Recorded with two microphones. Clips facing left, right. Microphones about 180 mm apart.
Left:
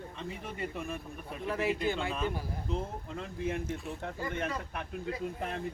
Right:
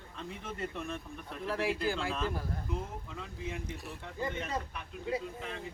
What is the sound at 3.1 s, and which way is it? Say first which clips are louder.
Speech: left 8 dB; 55° left (ahead or behind).